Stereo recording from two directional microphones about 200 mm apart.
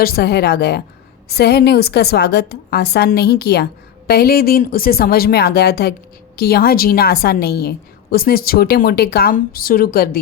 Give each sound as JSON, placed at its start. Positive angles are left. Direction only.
{"t": 0.0, "sound": "a woman's voice", "side_deg": 50}